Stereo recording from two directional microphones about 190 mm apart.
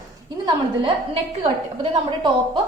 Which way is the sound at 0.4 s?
30° right (ahead or behind).